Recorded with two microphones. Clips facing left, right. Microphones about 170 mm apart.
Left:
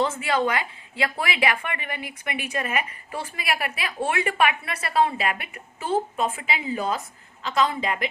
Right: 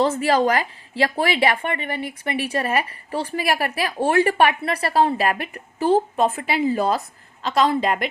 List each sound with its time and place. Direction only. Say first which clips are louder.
0.0 s a woman's voice: right 5 dB; 35° right (ahead or behind)